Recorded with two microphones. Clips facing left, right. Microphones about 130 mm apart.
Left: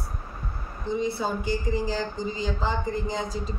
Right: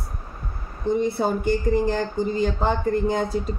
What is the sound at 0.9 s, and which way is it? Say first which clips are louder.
A man's voice: right 3 dB; 55° right (ahead or behind).